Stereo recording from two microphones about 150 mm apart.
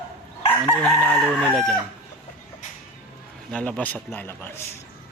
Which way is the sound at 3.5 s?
5° left (ahead or behind).